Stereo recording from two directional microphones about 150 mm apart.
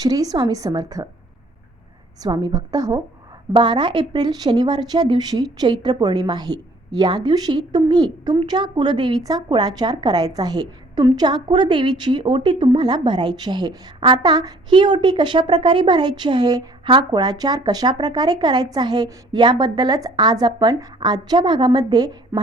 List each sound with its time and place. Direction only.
0.0 s speech: 25° right (ahead or behind)
2.2 s speech: 25° right (ahead or behind)